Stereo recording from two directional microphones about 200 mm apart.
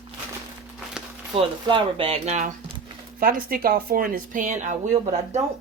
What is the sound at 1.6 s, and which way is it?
Speech, 25° right (ahead or behind).